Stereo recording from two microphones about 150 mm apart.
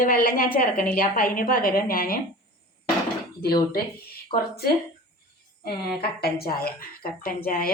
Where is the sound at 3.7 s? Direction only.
90° left.